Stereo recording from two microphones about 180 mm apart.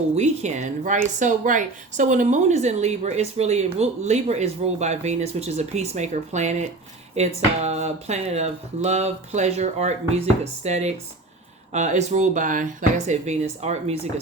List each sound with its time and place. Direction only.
0.2 s speech: 40° right (ahead or behind)